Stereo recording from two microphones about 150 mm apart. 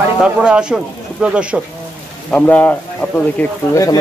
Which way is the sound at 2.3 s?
10° left (ahead or behind).